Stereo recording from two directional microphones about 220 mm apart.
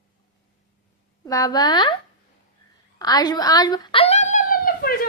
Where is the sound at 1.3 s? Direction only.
15° left (ahead or behind).